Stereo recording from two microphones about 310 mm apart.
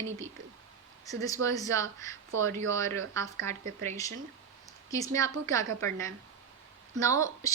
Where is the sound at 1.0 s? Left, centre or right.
Centre.